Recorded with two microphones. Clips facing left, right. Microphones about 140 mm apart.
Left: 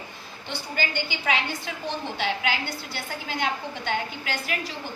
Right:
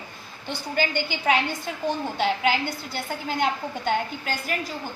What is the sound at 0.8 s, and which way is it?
A woman's voice, 45° right (ahead or behind).